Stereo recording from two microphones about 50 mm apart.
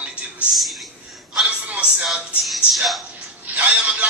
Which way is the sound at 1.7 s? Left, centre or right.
Right.